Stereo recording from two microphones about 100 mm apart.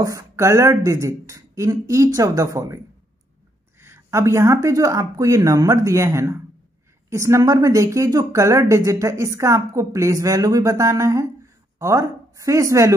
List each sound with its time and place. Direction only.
0.0 s a woman's voice: 30° right (ahead or behind)
3.8 s a woman's voice: 25° right (ahead or behind)